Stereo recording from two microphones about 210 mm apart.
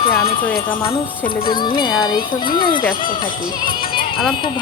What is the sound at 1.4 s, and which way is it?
Speech, 20° left (ahead or behind).